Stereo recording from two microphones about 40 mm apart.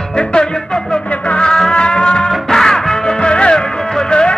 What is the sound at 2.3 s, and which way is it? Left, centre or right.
Music, centre.